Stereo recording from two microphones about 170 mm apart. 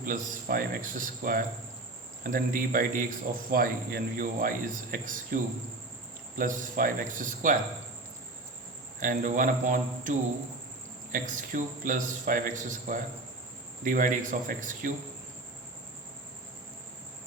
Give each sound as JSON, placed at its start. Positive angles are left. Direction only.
{"t": 0.0, "sound": "a man's voice", "side_deg": -55}
{"t": 9.0, "sound": "a man's voice", "side_deg": -50}